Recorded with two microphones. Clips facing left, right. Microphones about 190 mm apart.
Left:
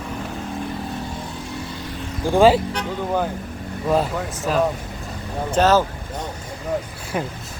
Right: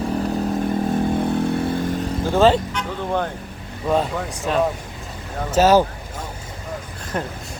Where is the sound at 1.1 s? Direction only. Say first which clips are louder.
Right 11 dB; 60° right (ahead or behind).